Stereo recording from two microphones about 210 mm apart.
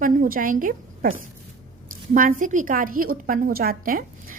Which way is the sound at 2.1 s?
40° right (ahead or behind).